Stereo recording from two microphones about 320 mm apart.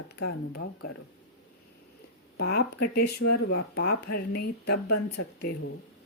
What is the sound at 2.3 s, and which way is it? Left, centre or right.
Speech, left.